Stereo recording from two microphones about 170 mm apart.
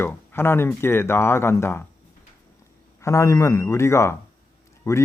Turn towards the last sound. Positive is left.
turn(degrees=15)  # may be behind; listen again after turning